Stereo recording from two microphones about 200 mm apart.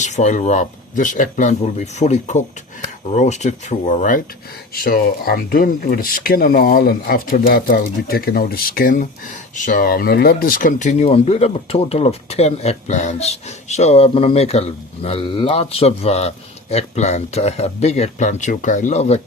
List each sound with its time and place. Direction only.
0.0 s a man's voice: 35° left (ahead or behind)